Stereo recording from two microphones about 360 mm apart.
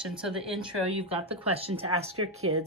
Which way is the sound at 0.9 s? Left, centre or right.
Centre.